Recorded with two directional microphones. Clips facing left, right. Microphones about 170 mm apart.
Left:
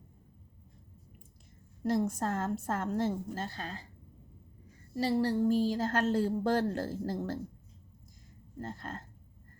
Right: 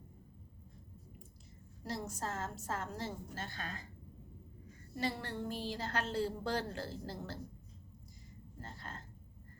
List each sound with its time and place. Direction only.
1.8 s a woman's voice: 50° left (ahead or behind)
3.4 s speech: 35° left (ahead or behind)
4.9 s a woman's voice: 35° left (ahead or behind)
8.5 s a woman's voice: 50° left (ahead or behind)